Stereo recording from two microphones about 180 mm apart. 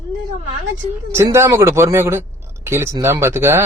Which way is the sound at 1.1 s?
15° right (ahead or behind).